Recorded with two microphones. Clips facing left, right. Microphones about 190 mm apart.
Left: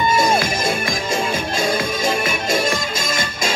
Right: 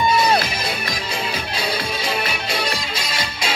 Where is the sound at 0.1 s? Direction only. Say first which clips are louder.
Left 1 dB; 45° left (ahead or behind).